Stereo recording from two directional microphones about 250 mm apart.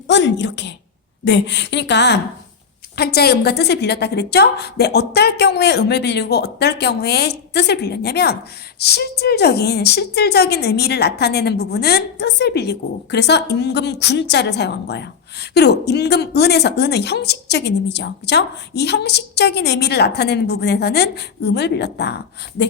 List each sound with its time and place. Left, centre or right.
0.1 s a woman's voice: left